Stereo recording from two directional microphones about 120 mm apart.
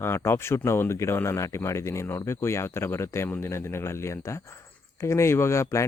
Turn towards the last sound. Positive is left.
turn(degrees=25)  # may be behind; listen again after turning